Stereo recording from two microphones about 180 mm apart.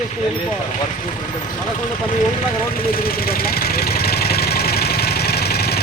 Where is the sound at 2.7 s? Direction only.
55° left (ahead or behind).